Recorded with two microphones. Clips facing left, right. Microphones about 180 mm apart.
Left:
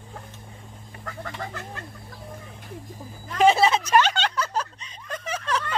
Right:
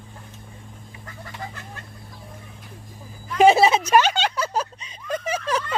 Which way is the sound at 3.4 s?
10° right (ahead or behind).